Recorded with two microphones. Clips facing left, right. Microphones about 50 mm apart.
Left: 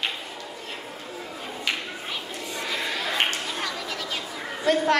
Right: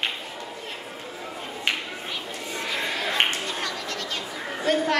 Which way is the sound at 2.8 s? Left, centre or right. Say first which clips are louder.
Right 1 dB; centre.